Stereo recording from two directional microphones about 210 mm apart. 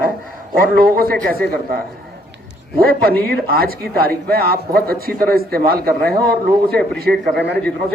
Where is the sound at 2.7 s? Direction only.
45° right (ahead or behind).